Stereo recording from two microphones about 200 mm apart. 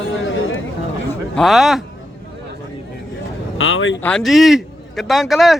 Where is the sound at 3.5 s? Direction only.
85° left.